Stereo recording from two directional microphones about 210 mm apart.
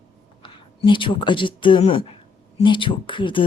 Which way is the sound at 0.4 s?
25° left (ahead or behind).